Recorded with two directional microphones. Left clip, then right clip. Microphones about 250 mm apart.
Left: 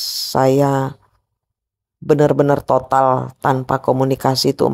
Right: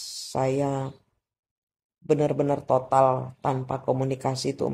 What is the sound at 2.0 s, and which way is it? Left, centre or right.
Speech, left.